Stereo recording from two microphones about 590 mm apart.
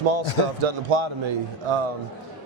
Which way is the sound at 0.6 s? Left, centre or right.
Right.